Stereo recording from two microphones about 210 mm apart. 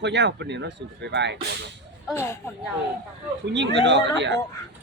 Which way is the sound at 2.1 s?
10° left (ahead or behind).